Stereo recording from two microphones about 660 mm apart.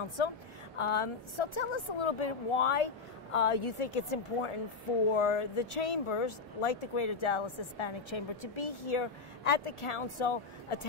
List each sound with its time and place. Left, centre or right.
0.2 s speech: left